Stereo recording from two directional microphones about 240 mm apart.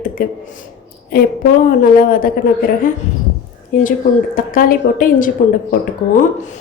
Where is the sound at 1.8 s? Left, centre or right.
Left.